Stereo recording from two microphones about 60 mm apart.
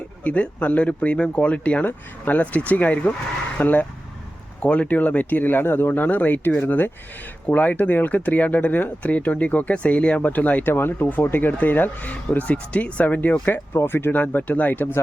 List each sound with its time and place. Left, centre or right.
0.3 s speech: left
13.7 s speech: left
14.1 s speech: left